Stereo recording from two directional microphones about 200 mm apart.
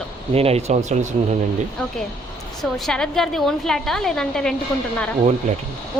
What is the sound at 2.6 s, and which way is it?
A woman's voice, centre (ahead or behind).